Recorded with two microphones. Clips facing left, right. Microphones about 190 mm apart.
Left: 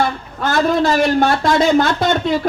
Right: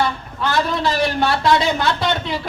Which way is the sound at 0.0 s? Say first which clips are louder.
Left 2 dB; 45° left (ahead or behind).